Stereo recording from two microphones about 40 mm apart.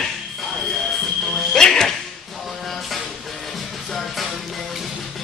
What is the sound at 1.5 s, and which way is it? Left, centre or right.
Music, centre.